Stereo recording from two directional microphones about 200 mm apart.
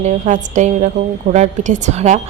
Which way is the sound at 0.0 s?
35° right (ahead or behind).